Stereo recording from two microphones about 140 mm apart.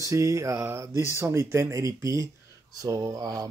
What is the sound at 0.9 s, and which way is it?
Speech, 25° left (ahead or behind).